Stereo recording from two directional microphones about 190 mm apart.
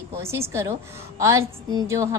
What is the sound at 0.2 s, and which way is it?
A woman's voice, 15° right (ahead or behind).